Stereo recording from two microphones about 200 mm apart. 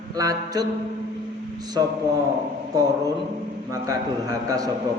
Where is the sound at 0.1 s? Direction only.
20° right (ahead or behind).